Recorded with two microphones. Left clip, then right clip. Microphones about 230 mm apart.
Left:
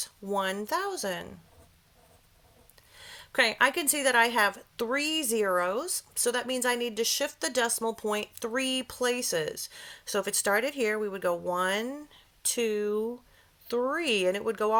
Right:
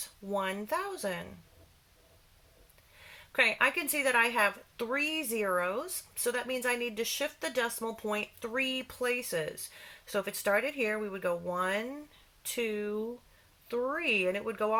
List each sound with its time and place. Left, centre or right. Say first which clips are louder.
0.3 s speech: left 3 dB; left
3.1 s speech: left 2 dB; left